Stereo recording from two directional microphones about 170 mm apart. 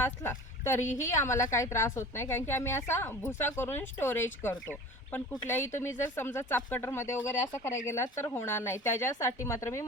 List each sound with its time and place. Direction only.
0.0 s a woman's voice: 15° left (ahead or behind)